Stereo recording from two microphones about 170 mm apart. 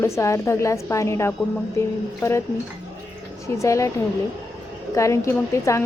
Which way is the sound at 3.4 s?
20° left (ahead or behind).